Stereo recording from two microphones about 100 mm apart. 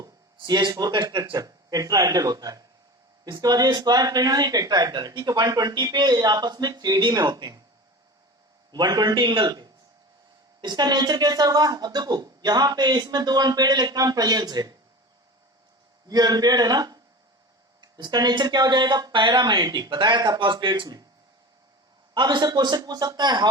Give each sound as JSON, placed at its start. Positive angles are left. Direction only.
{"t": 0.0, "sound": "a sound", "side_deg": -45}
{"t": 0.7, "sound": "speech", "side_deg": -40}
{"t": 8.7, "sound": "speech", "side_deg": -45}
{"t": 16.0, "sound": "speech", "side_deg": -40}
{"t": 22.1, "sound": "speech", "side_deg": -50}